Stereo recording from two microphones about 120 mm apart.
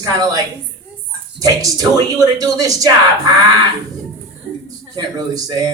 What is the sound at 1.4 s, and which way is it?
Speech, 30° right (ahead or behind).